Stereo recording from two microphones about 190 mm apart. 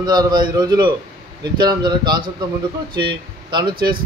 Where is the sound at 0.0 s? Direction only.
20° right (ahead or behind).